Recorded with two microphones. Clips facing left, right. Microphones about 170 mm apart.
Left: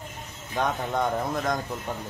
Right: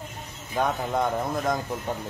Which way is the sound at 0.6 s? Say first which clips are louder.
Right 1 dB; centre (ahead or behind).